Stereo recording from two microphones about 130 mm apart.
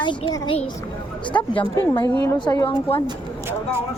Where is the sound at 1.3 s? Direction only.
20° left (ahead or behind).